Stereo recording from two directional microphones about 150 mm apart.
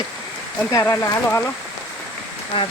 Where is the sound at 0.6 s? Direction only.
15° left (ahead or behind).